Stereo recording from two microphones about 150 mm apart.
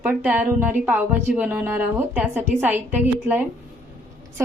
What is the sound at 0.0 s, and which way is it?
A woman's voice, 10° right (ahead or behind).